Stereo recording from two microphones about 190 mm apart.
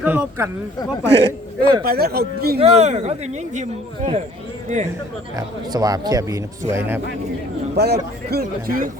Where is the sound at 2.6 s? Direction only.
35° right (ahead or behind).